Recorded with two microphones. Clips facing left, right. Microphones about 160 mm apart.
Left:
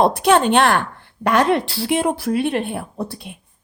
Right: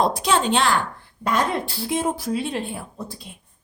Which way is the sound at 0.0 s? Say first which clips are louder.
Left 6 dB; 60° left (ahead or behind).